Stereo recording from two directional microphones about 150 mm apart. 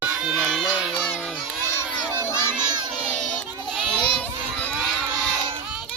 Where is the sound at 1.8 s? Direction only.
15° left (ahead or behind).